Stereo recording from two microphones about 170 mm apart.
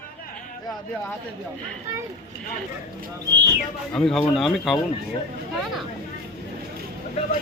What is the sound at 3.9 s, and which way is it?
Speech, centre (ahead or behind).